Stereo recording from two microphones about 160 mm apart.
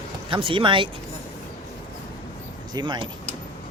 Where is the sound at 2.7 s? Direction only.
25° right (ahead or behind).